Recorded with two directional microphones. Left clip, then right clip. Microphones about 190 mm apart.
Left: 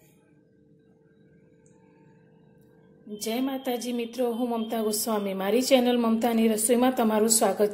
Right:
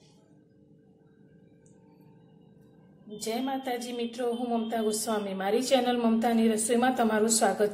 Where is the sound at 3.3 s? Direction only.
30° left (ahead or behind).